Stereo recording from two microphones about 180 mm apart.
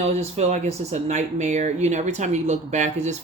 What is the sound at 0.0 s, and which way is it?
Speech, 35° right (ahead or behind).